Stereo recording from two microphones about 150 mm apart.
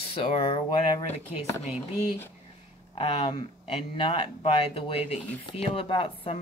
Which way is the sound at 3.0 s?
40° left (ahead or behind).